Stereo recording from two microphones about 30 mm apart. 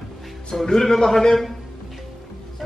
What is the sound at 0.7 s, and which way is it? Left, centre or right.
Speech, centre.